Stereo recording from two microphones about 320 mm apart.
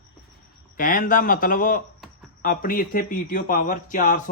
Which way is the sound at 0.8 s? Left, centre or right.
Left.